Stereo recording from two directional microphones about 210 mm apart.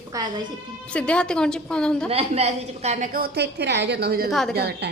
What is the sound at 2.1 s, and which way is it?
A woman's voice, 30° right (ahead or behind).